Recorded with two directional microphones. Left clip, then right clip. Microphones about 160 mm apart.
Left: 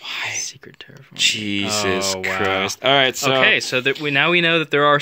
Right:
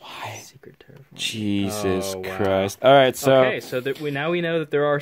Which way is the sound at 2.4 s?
50° right (ahead or behind).